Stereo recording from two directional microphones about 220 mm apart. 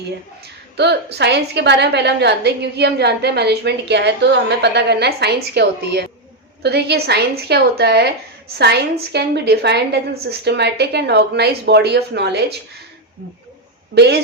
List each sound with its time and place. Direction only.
0.8 s a woman's voice: 50° right (ahead or behind)
13.9 s a woman's voice: 50° right (ahead or behind)